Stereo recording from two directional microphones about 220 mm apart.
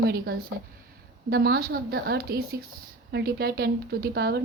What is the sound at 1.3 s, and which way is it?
Speech, 45° right (ahead or behind).